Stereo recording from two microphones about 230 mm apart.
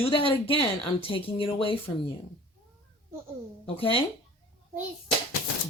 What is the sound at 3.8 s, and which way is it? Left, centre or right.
Speech, left.